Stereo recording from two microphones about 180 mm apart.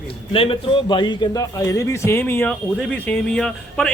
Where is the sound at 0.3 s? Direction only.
30° left (ahead or behind).